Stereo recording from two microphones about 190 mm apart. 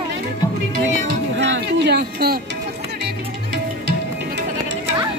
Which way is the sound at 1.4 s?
65° right (ahead or behind).